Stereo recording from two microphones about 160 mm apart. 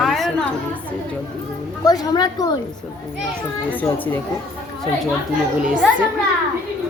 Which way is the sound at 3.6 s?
10° left (ahead or behind).